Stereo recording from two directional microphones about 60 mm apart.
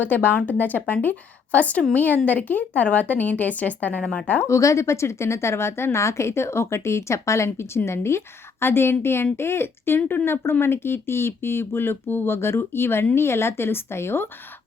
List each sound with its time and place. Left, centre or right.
0.0 s speech: left
4.4 s a woman's voice: left